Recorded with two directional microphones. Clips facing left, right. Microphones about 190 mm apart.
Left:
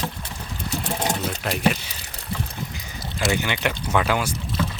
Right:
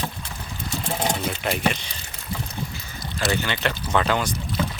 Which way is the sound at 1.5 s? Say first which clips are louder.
Left 2 dB; centre (ahead or behind).